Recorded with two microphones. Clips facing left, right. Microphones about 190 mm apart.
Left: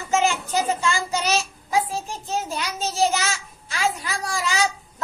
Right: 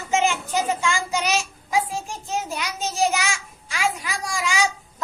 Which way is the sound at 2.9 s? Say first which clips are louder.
Left 1 dB; 15° right (ahead or behind).